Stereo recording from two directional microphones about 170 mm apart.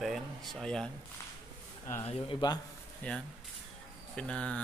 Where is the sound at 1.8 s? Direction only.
20° left (ahead or behind).